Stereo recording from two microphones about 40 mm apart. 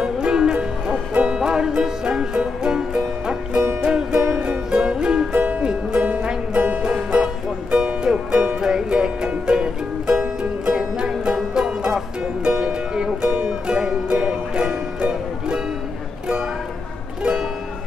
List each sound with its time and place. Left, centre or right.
0.0 s music: centre
6.2 s music: right
17.2 s music: centre